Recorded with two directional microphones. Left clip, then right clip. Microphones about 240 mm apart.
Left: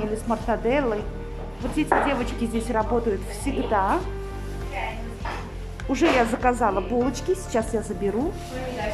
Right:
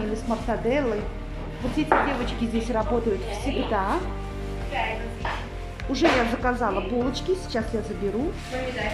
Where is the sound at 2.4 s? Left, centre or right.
Centre.